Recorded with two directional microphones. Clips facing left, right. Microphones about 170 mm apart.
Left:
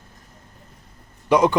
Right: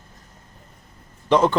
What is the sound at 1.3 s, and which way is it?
Speech, 10° left (ahead or behind).